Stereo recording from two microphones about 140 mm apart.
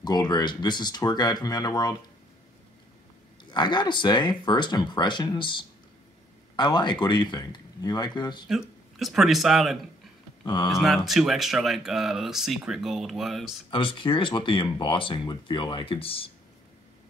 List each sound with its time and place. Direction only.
0.0 s speech: 30° left (ahead or behind)
3.4 s speech: 30° left (ahead or behind)
8.5 s speech: centre (ahead or behind)
10.4 s speech: 35° left (ahead or behind)
10.7 s speech: centre (ahead or behind)
13.7 s speech: 40° left (ahead or behind)